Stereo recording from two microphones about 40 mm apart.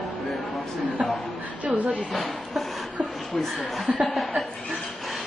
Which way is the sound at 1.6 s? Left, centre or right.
Right.